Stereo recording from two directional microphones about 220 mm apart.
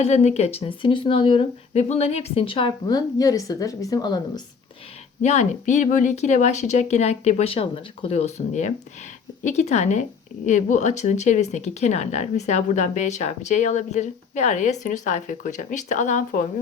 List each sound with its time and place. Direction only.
0.0 s speech: 30° left (ahead or behind)
5.2 s speech: 30° left (ahead or behind)